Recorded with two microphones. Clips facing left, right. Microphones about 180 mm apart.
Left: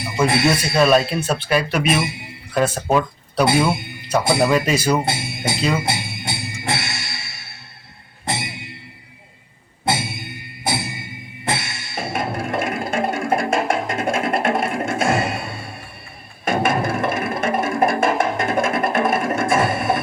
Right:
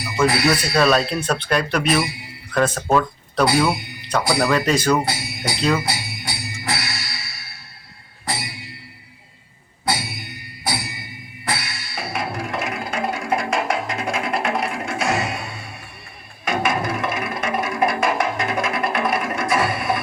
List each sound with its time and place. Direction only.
0.0 s speech: 25° left (ahead or behind)
1.2 s speech: 5° left (ahead or behind)
1.9 s a man's voice: 25° left (ahead or behind)
2.6 s speech: 10° left (ahead or behind)
3.4 s a man's voice: 25° left (ahead or behind)
4.5 s speech: 10° left (ahead or behind)
5.0 s speech: 25° left (ahead or behind)
5.7 s music: 25° left (ahead or behind)
9.8 s music: 25° left (ahead or behind)
12.1 s music: 50° left (ahead or behind)
16.9 s music: 50° left (ahead or behind)
18.9 s a sound: 50° left (ahead or behind)